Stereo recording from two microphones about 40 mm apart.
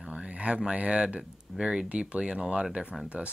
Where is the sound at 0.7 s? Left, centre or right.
Right.